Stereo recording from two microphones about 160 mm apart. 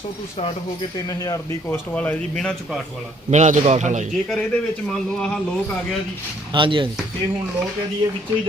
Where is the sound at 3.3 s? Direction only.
50° right (ahead or behind).